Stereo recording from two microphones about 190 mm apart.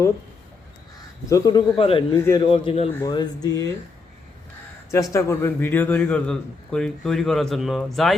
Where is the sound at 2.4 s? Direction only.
30° left (ahead or behind).